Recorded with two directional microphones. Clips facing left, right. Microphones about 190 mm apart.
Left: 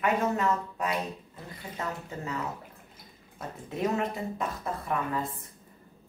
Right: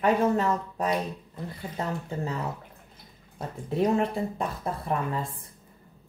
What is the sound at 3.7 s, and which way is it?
Speech, 30° right (ahead or behind).